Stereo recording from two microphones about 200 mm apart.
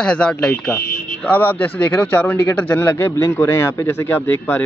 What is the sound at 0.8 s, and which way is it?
Buzzer, 50° left (ahead or behind).